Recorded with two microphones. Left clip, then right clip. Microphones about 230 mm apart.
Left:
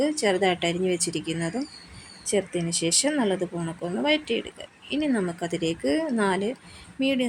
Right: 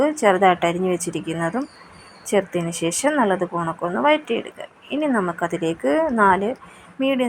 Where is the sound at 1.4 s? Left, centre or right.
Centre.